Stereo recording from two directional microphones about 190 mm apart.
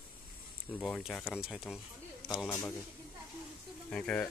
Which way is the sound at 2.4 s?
10° left (ahead or behind).